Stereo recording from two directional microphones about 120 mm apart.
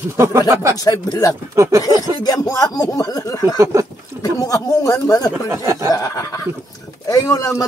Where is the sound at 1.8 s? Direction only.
35° left (ahead or behind).